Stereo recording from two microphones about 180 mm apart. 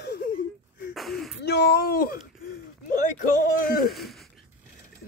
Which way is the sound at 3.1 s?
45° left (ahead or behind).